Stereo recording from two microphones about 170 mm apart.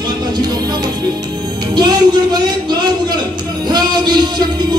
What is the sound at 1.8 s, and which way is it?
Music, 25° right (ahead or behind).